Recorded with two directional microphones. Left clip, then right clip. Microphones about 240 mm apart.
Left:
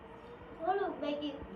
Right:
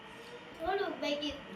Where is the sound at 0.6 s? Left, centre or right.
Centre.